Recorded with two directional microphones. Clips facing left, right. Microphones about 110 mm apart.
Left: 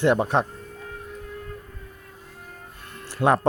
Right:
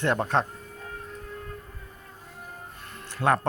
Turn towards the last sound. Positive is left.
turn(degrees=15)  # may be behind; listen again after turning